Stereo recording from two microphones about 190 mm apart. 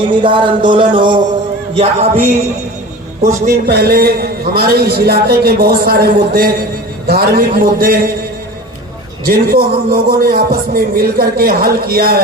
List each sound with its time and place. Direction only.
0.0 s speech: 25° right (ahead or behind)
1.7 s music: 35° right (ahead or behind)
3.7 s a man's voice: 55° right (ahead or behind)
9.2 s a man's voice: 50° right (ahead or behind)